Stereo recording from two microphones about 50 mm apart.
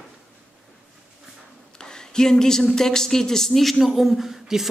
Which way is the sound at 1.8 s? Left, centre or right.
Centre.